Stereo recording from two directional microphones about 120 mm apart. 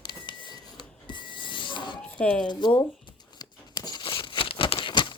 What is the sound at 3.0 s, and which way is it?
Crumpling, 40° left (ahead or behind).